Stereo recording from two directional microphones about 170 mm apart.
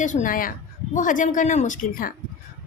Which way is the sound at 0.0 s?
45° left (ahead or behind).